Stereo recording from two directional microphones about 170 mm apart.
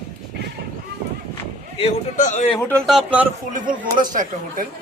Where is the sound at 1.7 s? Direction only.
40° left (ahead or behind).